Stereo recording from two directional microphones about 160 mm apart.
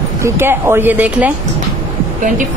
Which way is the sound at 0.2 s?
15° right (ahead or behind).